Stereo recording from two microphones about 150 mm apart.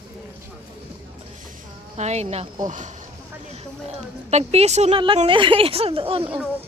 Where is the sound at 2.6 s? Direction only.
55° right (ahead or behind).